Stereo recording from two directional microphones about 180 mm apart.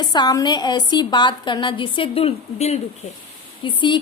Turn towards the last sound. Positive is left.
turn(degrees=25)  # may be behind; listen again after turning